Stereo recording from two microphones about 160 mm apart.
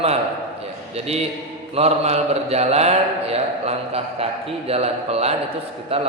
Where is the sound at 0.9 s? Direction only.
40° right (ahead or behind).